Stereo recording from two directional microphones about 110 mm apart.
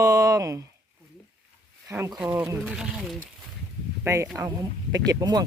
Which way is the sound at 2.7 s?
Centre (ahead or behind).